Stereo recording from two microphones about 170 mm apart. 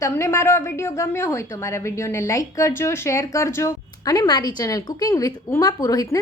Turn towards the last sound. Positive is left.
turn(degrees=20)  # may be behind; listen again after turning